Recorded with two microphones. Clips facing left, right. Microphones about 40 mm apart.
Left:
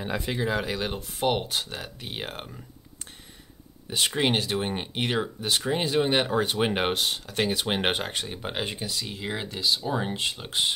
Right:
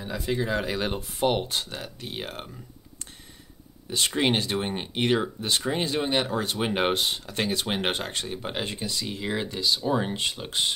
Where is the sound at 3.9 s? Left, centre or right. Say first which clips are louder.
Even; centre.